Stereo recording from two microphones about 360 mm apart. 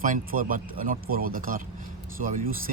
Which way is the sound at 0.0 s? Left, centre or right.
Right.